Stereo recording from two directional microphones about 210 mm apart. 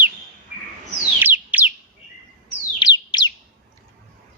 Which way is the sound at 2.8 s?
20° left (ahead or behind).